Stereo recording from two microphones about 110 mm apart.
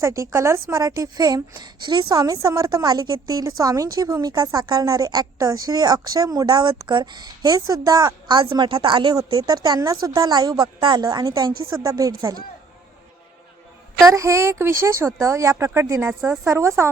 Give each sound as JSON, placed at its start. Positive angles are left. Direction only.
{"t": 0.0, "sound": "a woman's voice", "side_deg": -25}
{"t": 9.5, "sound": "a woman's voice", "side_deg": -35}
{"t": 11.0, "sound": "a woman's voice", "side_deg": -35}
{"t": 14.0, "sound": "speech", "side_deg": -30}